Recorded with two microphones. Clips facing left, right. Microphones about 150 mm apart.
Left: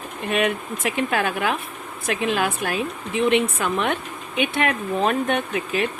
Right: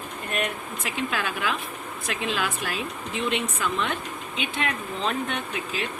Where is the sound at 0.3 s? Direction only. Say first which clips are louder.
Left 8 dB; 85° left; by 5.9 s 60° left (ahead or behind).